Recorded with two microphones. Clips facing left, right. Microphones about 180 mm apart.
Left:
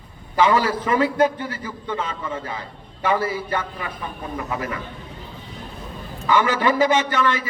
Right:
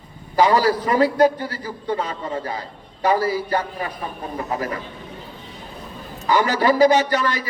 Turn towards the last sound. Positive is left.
turn(degrees=-35)  # may be behind; listen again after turning